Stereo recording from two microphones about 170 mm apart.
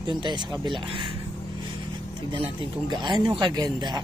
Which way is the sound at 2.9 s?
25° right (ahead or behind).